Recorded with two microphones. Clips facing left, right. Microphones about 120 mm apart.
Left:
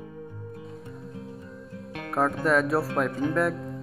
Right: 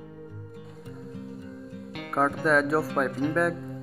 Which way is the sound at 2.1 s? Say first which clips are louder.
Even; centre (ahead or behind).